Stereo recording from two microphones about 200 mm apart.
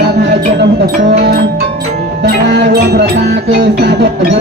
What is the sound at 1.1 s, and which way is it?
Music, 55° right (ahead or behind).